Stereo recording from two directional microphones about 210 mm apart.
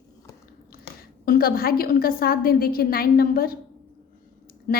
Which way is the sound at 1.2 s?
45° left (ahead or behind).